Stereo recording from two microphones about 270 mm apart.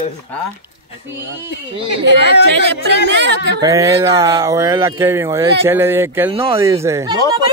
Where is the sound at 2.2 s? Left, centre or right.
Left.